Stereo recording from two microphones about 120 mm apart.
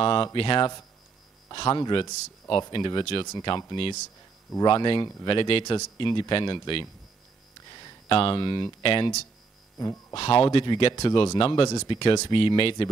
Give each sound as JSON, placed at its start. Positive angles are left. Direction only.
{"t": 0.0, "sound": "speech", "side_deg": 45}
{"t": 10.1, "sound": "speech", "side_deg": 45}